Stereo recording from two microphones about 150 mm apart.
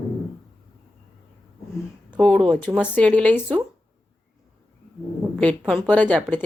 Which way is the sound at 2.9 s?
10° left (ahead or behind).